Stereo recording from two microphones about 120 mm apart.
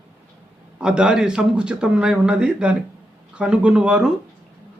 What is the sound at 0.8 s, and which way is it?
Speech, 5° right (ahead or behind).